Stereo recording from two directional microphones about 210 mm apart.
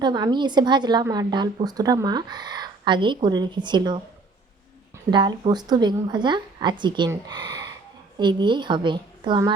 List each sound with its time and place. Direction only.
0.0 s a woman's voice: 20° right (ahead or behind)
5.1 s a woman's voice: 20° right (ahead or behind)